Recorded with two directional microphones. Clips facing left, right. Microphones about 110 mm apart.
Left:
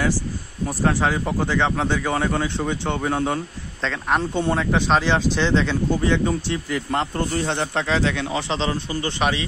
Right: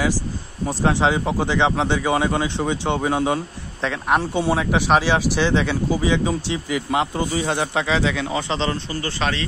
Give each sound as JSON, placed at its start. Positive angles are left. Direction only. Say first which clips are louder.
{"t": 0.7, "sound": "speech", "louder": "right 2 dB", "side_deg": -20}
{"t": 9.0, "sound": "a man's voice", "louder": "left 2 dB", "side_deg": 15}